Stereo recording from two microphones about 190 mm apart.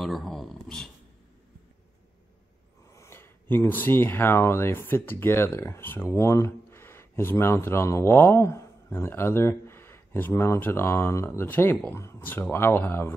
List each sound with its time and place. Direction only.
0.0 s speech: centre (ahead or behind)
2.9 s speech: 15° left (ahead or behind)